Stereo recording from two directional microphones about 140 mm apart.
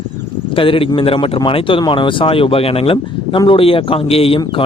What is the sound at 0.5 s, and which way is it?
Speech, 40° left (ahead or behind).